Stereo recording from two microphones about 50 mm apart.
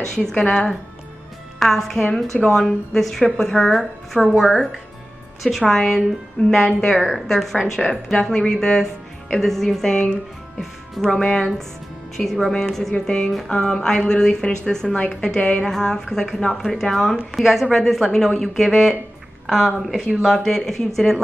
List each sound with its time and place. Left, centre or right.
0.0 s a woman's voice: centre
1.6 s a woman's voice: centre
7.0 s a woman's voice: centre
12.9 s a woman's voice: centre
15.7 s a woman's voice: centre
20.2 s a woman's voice: centre